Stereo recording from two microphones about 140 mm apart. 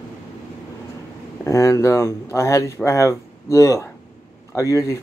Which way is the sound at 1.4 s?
25° left (ahead or behind).